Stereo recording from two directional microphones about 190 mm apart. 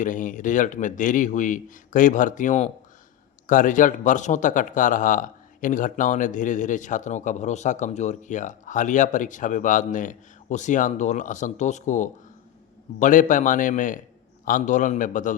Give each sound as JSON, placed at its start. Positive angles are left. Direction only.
{"t": 0.0, "sound": "a man's voice", "side_deg": 45}